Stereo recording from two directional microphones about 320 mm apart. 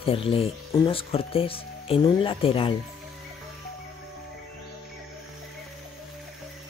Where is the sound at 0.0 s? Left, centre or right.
Centre.